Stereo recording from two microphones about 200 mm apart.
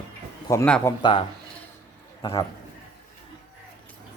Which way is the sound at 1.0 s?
25° left (ahead or behind).